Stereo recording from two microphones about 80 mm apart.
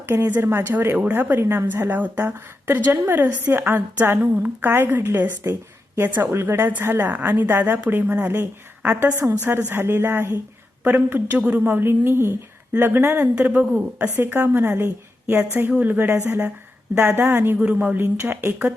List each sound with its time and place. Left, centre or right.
0.0 s a woman's voice: right